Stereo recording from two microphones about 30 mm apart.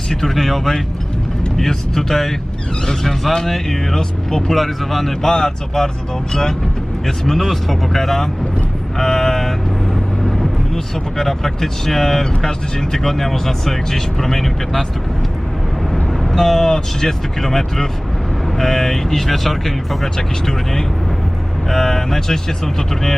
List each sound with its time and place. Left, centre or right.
0.1 s speech: centre
4.5 s a man's voice: centre
5.3 s speech: centre
7.3 s speech: centre
9.0 s vehicle: centre
10.2 s vehicle: centre
11.2 s speech: centre
16.3 s speech: centre
20.1 s speech: left